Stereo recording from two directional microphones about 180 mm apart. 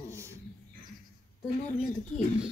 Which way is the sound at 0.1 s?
15° right (ahead or behind).